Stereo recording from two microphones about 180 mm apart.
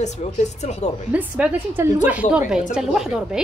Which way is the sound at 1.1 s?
10° right (ahead or behind).